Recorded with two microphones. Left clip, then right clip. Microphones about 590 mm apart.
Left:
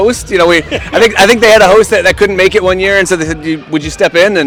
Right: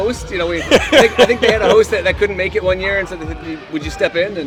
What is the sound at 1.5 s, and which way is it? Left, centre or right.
Speech, left.